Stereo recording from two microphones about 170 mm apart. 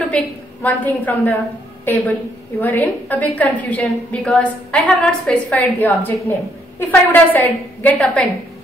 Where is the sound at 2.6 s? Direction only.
10° left (ahead or behind).